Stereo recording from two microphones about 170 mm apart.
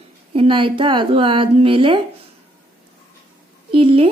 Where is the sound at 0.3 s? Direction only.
30° right (ahead or behind).